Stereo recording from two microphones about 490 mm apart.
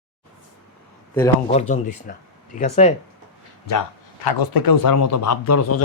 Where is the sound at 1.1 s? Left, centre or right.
Centre.